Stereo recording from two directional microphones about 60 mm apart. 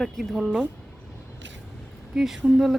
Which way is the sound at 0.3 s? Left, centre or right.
Centre.